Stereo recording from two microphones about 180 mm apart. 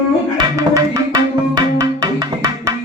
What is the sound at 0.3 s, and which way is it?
Music, 20° right (ahead or behind).